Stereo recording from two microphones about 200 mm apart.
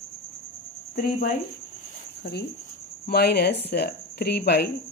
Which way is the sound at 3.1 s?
55° left (ahead or behind).